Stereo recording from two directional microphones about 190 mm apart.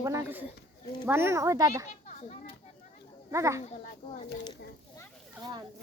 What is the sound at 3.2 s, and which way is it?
Speech, 15° right (ahead or behind).